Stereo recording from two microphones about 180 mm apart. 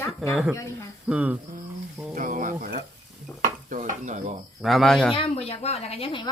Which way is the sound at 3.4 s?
45° right (ahead or behind).